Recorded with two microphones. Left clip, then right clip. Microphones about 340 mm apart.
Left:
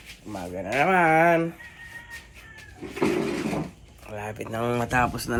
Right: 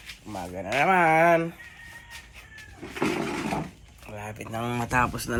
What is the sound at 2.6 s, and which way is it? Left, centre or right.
Cat, centre.